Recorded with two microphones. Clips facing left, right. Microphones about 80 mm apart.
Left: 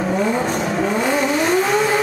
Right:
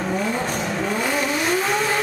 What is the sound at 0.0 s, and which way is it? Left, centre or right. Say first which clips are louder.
Vehicle: left 5 dB; centre.